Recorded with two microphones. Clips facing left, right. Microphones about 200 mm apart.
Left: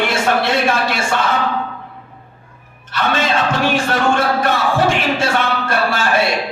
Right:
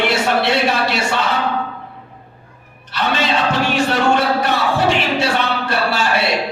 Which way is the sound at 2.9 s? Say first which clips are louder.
Left 1 dB; 50° left (ahead or behind).